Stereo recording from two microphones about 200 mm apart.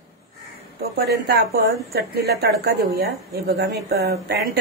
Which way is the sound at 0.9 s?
50° right (ahead or behind).